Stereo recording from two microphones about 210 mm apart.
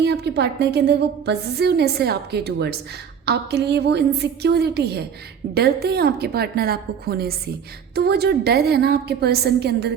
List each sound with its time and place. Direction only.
0.0 s a woman's voice: 50° right (ahead or behind)